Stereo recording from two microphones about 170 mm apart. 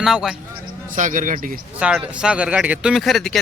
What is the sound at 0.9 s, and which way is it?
Speech, 50° right (ahead or behind).